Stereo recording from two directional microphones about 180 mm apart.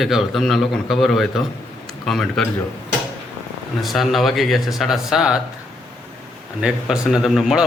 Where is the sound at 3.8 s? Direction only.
Centre (ahead or behind).